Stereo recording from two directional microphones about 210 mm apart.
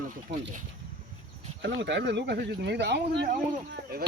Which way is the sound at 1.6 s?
55° right (ahead or behind).